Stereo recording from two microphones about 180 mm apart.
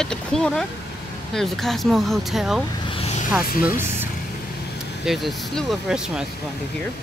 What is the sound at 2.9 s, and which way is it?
Vehicle, 35° left (ahead or behind).